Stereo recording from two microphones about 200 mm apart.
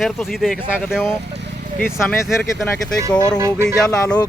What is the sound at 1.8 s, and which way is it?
Speech, 10° left (ahead or behind).